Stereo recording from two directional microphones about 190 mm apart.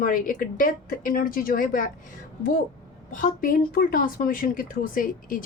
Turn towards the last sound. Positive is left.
turn(degrees=45)  # may be behind; listen again after turning